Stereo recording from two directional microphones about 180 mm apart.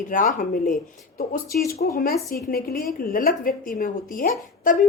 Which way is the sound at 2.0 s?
55° left (ahead or behind).